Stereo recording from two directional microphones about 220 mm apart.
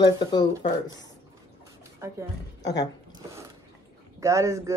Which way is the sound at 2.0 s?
15° right (ahead or behind).